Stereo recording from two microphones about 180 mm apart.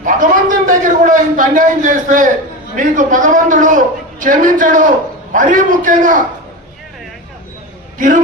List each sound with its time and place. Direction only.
0.0 s a sound: 45° right (ahead or behind)
2.7 s a man's voice: 45° right (ahead or behind)
7.9 s a man's voice: 45° right (ahead or behind)